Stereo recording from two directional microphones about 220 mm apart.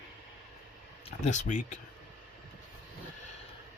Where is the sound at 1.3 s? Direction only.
35° left (ahead or behind).